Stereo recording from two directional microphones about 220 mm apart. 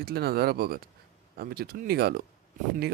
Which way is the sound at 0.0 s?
45° right (ahead or behind).